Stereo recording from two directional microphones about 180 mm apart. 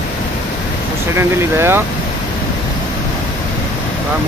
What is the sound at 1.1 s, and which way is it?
Speech, 15° right (ahead or behind).